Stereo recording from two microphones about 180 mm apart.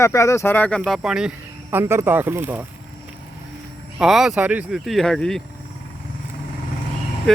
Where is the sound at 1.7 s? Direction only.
15° right (ahead or behind).